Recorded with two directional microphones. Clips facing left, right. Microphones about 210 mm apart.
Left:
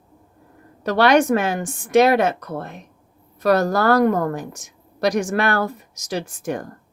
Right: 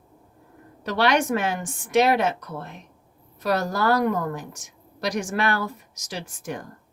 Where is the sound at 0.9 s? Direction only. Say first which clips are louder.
Left 6 dB; 45° left (ahead or behind).